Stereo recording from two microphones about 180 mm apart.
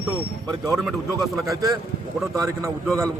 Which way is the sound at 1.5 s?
20° right (ahead or behind).